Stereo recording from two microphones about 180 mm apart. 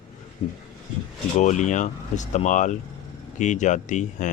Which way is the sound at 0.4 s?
35° left (ahead or behind).